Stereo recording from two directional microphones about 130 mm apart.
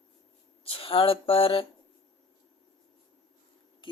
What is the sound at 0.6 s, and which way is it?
Speech, 45° left (ahead or behind).